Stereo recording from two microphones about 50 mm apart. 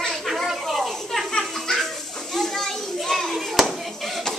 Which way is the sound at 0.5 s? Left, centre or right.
Centre.